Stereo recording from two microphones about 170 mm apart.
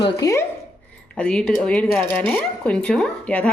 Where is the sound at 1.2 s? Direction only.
5° left (ahead or behind).